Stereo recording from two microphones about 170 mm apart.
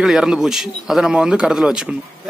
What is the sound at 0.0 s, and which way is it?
A man's voice, 5° right (ahead or behind).